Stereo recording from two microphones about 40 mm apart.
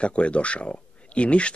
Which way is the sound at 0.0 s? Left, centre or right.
Left.